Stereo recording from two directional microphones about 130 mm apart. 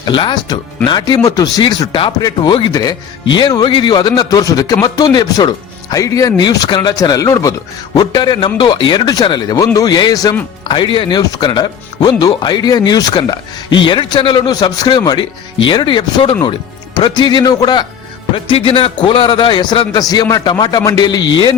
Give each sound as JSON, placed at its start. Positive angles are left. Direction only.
{"t": 0.0, "sound": "speech", "side_deg": 35}